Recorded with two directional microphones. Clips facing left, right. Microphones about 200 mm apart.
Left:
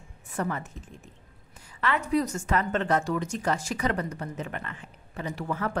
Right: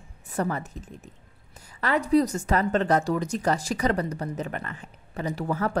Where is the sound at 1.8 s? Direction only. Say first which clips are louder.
Right 4 dB; 35° right (ahead or behind).